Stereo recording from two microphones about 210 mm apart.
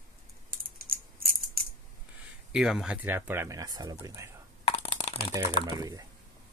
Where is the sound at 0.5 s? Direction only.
45° right (ahead or behind).